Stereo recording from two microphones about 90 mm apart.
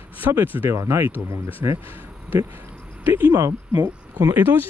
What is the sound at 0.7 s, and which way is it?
Speech, 30° right (ahead or behind).